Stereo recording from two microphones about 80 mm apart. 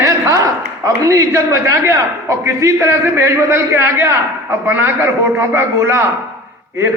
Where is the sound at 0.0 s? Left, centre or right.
Right.